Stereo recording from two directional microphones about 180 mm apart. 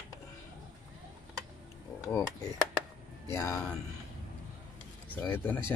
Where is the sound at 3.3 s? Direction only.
15° left (ahead or behind).